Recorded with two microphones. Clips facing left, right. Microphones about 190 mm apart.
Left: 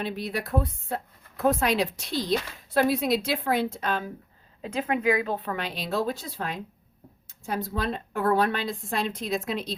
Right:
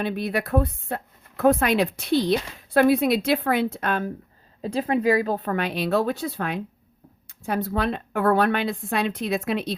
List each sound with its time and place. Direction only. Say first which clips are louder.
0.0 s a woman's voice: right 5 dB; 60° right (ahead or behind)
4.6 s a woman's voice: right 4 dB; 35° right (ahead or behind); by 9.7 s 65° right (ahead or behind)